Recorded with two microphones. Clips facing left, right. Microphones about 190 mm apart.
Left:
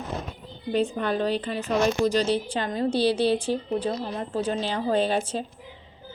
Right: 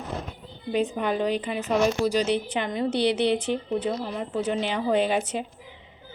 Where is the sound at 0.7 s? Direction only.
15° right (ahead or behind).